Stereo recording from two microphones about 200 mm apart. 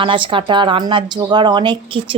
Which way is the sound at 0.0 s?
25° right (ahead or behind).